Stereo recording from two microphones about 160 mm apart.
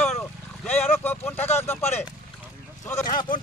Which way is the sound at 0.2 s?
15° left (ahead or behind).